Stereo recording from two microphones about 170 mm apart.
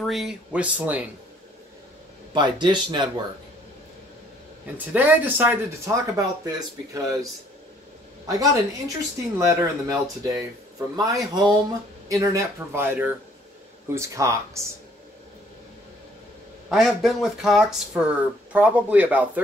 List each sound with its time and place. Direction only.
0.0 s speech: centre (ahead or behind)
2.3 s speech: 25° right (ahead or behind)
4.7 s speech: 10° right (ahead or behind)
8.3 s speech: 20° right (ahead or behind)
16.6 s speech: centre (ahead or behind)